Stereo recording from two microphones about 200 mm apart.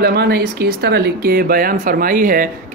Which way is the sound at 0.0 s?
50° right (ahead or behind).